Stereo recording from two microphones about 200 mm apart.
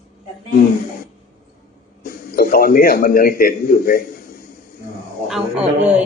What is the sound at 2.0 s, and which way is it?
A man's voice, 45° left (ahead or behind).